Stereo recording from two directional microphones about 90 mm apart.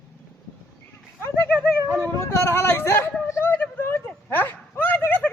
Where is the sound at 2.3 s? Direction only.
30° left (ahead or behind).